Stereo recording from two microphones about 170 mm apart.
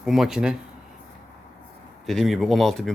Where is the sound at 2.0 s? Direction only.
Centre (ahead or behind).